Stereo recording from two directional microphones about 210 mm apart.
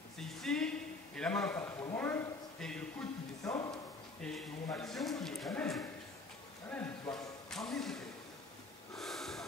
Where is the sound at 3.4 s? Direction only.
20° left (ahead or behind).